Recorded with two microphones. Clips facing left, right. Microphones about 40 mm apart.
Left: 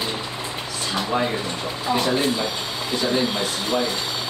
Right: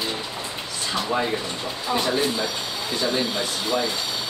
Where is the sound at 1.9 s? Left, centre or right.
Left.